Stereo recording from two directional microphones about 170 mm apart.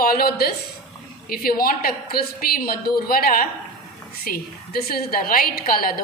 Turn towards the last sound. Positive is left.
turn(degrees=60)  # may be behind; listen again after turning